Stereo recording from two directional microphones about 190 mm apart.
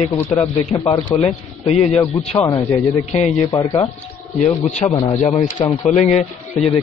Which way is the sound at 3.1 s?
35° left (ahead or behind).